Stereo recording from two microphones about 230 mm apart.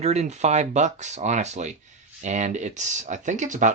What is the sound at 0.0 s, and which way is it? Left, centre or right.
Speech, right.